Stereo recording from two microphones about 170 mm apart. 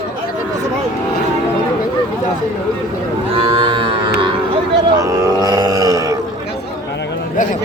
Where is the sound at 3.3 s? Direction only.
35° right (ahead or behind).